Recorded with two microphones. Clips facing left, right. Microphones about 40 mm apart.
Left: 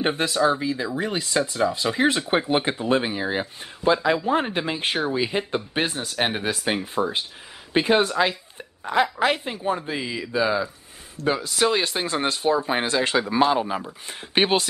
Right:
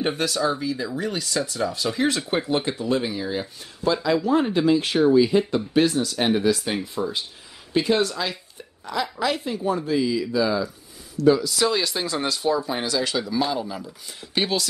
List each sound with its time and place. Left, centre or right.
0.0 s speech: left